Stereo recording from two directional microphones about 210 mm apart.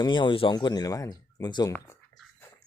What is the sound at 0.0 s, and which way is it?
Speech, 20° left (ahead or behind).